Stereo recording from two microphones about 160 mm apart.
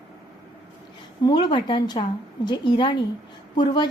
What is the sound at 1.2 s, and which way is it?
A woman's voice, 30° left (ahead or behind).